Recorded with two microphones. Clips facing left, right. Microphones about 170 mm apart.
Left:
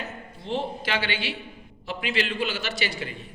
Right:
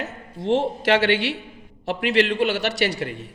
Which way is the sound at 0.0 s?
75° right (ahead or behind).